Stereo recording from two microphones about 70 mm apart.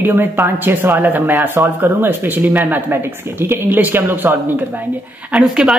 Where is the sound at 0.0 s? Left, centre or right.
Right.